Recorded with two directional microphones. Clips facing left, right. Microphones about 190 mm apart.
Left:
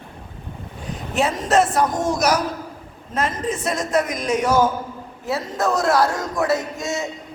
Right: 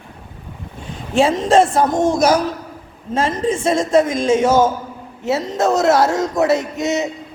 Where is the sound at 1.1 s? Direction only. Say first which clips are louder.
Right 5 dB; 25° right (ahead or behind).